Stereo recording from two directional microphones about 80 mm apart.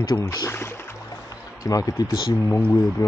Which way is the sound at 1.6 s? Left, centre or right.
Left.